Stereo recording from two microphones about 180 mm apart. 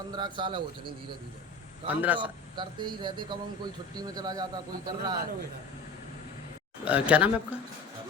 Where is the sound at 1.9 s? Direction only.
10° right (ahead or behind).